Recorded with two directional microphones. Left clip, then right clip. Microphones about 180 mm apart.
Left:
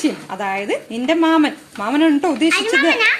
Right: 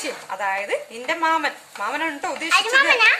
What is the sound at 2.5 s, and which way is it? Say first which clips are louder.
Speech: right 2 dB; 40° right (ahead or behind).